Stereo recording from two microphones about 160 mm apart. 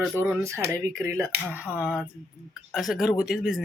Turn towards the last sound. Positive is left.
turn(degrees=-5)  # may be behind; listen again after turning